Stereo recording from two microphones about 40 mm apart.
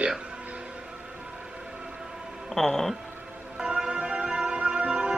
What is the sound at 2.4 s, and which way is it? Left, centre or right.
Speech, centre.